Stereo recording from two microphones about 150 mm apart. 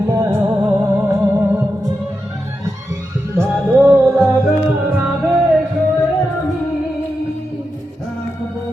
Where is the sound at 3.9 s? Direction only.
10° right (ahead or behind).